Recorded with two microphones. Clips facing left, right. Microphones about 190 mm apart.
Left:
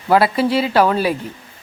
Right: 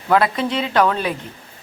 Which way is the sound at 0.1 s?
5° left (ahead or behind).